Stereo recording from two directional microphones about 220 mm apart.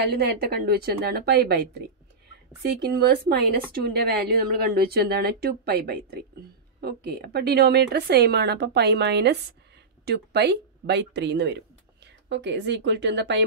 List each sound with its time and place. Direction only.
0.0 s speech: 45° right (ahead or behind)